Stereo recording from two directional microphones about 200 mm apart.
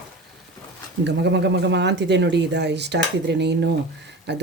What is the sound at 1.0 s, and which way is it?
Speech, 60° right (ahead or behind).